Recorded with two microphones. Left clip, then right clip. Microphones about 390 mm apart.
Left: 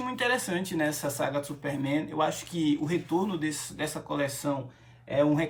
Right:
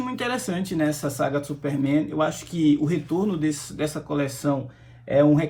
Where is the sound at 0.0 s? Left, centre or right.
Centre.